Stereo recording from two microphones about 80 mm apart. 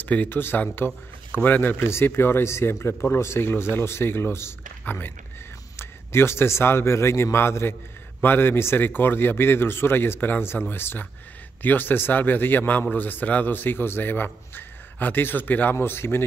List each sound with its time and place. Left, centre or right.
0.0 s a man's voice: left